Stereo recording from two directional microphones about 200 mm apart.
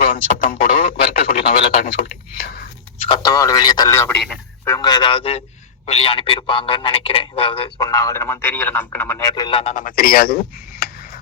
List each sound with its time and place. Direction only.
0.0 s radio: 45° left (ahead or behind)
3.1 s a man's voice: 15° left (ahead or behind)
9.7 s speech: 45° left (ahead or behind)